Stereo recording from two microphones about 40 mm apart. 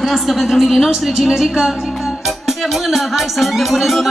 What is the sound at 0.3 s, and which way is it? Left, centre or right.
A woman's voice, centre.